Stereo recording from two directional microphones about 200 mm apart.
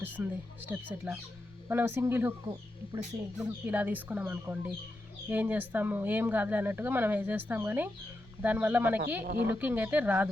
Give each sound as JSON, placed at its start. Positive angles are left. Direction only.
{"t": 0.0, "sound": "speech", "side_deg": -10}
{"t": 9.2, "sound": "speech", "side_deg": -45}
{"t": 9.5, "sound": "speech", "side_deg": -10}